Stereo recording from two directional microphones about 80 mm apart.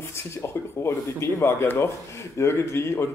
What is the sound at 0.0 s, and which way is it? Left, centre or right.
Speech, left.